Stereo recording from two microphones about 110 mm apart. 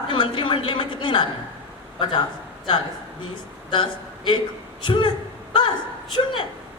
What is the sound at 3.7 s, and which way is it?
A man's voice, 50° left (ahead or behind).